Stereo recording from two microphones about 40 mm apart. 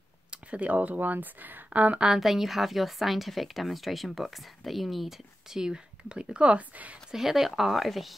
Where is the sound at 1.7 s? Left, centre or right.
Right.